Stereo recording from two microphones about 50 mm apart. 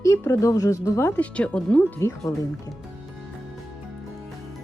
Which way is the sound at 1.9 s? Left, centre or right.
Left.